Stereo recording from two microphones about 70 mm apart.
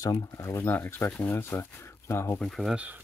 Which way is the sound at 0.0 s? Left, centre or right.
Left.